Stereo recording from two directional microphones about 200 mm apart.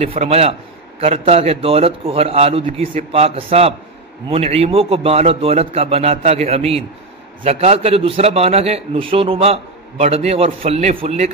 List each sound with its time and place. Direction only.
0.0 s a man's voice: 30° right (ahead or behind)